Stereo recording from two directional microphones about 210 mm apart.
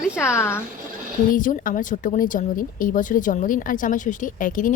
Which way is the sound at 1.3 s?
40° left (ahead or behind).